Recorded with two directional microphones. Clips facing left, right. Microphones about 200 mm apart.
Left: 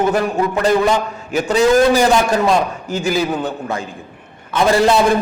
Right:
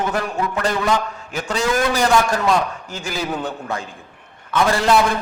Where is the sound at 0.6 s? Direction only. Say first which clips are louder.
Left 5 dB; 10° left (ahead or behind).